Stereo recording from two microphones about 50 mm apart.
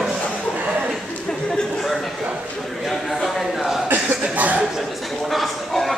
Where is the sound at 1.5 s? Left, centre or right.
Centre.